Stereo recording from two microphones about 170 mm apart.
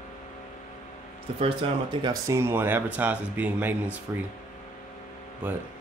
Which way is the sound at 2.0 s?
20° right (ahead or behind).